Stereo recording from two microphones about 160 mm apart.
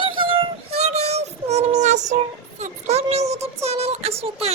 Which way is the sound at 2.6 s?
40° right (ahead or behind).